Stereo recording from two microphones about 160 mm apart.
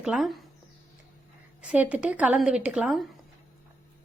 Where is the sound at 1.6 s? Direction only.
10° right (ahead or behind).